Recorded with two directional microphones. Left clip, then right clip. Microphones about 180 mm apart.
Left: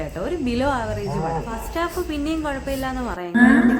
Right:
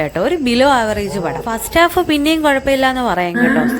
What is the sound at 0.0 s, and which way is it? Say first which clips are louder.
A woman's voice: right 10 dB; 35° right (ahead or behind).